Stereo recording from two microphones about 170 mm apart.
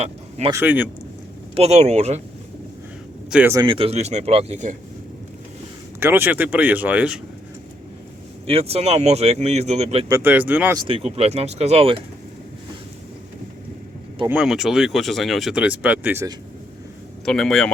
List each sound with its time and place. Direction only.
0.0 s speech: 35° right (ahead or behind)
0.5 s speech: 10° right (ahead or behind)
1.5 s speech: 40° right (ahead or behind)
3.2 s speech: 5° right (ahead or behind)
3.5 s speech: 25° right (ahead or behind); by 4.8 s 45° right (ahead or behind)
6.0 s speech: 10° right (ahead or behind)
8.4 s speech: 35° right (ahead or behind)
10.1 s speech: 15° right (ahead or behind)
10.8 s speech: 30° right (ahead or behind)
14.3 s speech: 5° right (ahead or behind)
17.2 s speech: centre (ahead or behind)